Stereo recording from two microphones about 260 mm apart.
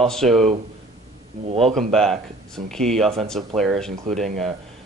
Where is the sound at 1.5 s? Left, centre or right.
Right.